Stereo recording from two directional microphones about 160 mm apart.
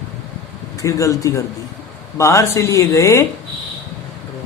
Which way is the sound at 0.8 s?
20° left (ahead or behind).